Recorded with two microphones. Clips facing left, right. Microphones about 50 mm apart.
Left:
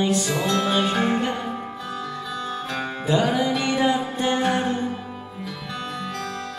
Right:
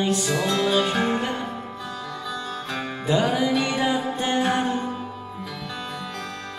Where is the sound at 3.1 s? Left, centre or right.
Centre.